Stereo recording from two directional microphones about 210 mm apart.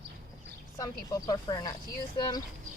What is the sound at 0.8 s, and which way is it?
Speech, 15° left (ahead or behind).